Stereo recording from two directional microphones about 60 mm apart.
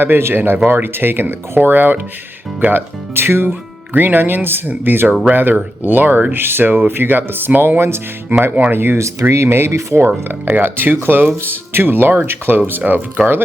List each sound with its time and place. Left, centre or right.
0.0 s speech: right
7.8 s speech: right
10.2 s speech: right